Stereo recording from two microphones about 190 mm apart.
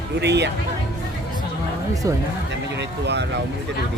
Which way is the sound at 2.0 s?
15° right (ahead or behind).